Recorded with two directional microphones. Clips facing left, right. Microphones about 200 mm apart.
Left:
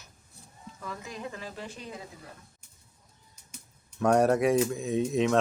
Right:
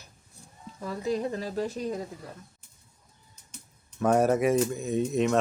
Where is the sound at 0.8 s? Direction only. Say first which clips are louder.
Right 10 dB; 35° right (ahead or behind).